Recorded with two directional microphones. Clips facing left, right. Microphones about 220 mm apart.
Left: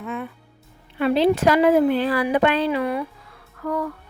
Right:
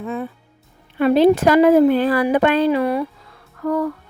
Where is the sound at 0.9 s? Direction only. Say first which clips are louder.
Right 5 dB; 45° right (ahead or behind).